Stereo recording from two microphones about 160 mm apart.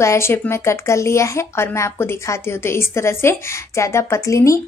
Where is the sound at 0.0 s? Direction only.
15° left (ahead or behind).